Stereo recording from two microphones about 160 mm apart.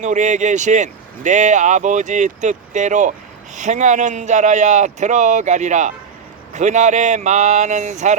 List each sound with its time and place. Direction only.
0.0 s speech: 50° right (ahead or behind)